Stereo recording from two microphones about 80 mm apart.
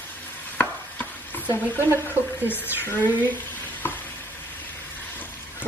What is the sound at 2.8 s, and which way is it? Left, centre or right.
Speech, left.